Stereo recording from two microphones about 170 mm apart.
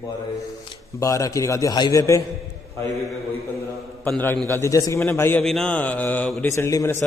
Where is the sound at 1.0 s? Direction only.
20° left (ahead or behind).